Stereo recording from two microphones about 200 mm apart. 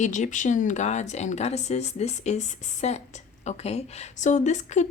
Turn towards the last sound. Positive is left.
turn(degrees=35)  # may be behind; listen again after turning